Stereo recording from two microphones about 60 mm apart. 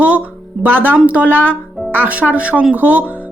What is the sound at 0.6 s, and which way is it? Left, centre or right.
Speech, right.